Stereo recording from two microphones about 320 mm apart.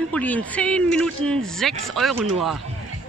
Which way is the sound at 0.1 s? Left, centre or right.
Centre.